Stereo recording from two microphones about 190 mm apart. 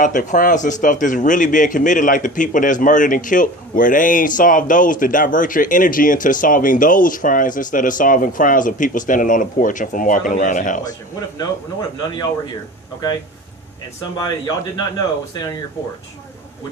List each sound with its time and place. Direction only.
0.0 s a man's voice: 40° left (ahead or behind)
11.3 s speech: 20° left (ahead or behind)
14.2 s speech: 20° left (ahead or behind)